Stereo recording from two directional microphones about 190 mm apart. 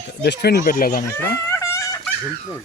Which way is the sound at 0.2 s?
60° left (ahead or behind).